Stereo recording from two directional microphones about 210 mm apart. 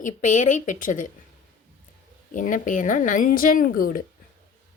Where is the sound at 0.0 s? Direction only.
35° left (ahead or behind).